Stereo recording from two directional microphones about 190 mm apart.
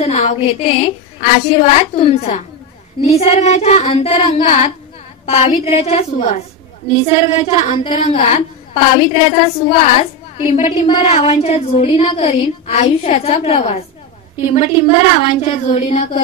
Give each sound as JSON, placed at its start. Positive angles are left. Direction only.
{"t": 0.0, "sound": "a woman's voice", "side_deg": 35}